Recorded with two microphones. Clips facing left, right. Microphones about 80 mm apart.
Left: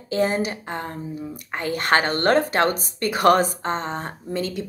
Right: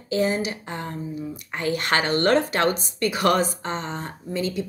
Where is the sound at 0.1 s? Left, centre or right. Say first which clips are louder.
Left 1 dB; left.